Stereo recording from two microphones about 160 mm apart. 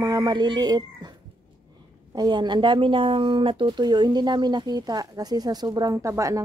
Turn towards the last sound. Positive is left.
turn(degrees=-20)  # may be behind; listen again after turning